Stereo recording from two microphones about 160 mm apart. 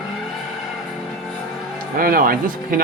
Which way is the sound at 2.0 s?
65° right (ahead or behind).